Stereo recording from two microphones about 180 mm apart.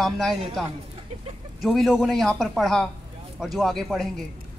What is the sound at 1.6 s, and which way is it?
Speech, centre (ahead or behind).